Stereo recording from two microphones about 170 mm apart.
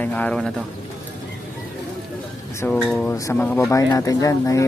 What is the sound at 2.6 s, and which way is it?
Speech, 5° left (ahead or behind).